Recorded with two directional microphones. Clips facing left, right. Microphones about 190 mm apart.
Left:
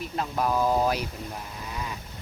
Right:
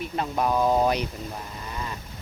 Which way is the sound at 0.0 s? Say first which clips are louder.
Right 2 dB; centre (ahead or behind).